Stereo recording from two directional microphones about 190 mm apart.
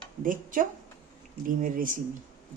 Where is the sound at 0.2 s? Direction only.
45° right (ahead or behind).